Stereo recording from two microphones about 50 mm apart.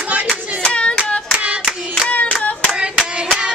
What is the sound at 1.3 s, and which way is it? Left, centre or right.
Clapping, right.